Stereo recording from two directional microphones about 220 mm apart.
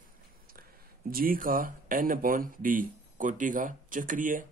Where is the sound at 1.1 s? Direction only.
40° right (ahead or behind).